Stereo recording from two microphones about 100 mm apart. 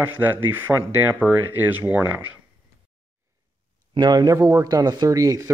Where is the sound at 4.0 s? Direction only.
40° right (ahead or behind).